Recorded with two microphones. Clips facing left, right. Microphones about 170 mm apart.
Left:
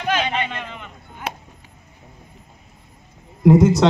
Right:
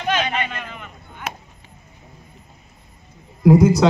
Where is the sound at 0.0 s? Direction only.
5° left (ahead or behind).